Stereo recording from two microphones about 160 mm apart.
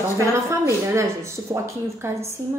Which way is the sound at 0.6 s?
15° right (ahead or behind).